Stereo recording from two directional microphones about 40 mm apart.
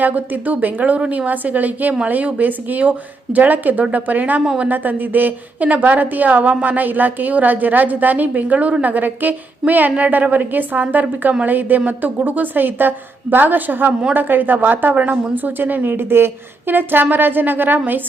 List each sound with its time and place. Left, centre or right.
0.0 s a woman's voice: right
14.9 s a woman's voice: right